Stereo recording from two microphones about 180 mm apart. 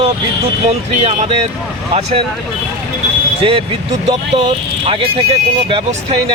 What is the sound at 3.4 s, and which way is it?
Speech, 30° right (ahead or behind).